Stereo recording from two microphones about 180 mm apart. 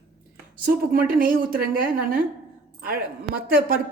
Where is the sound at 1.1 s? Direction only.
50° right (ahead or behind).